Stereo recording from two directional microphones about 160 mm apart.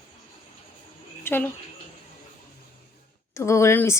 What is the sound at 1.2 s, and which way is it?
Speech, 15° left (ahead or behind).